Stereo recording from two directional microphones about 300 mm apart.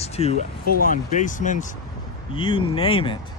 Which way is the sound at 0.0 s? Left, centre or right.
Left.